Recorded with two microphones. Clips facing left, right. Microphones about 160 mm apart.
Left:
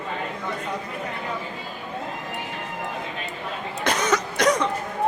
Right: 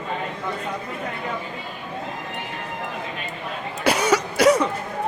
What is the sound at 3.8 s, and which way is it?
Cough, 10° right (ahead or behind).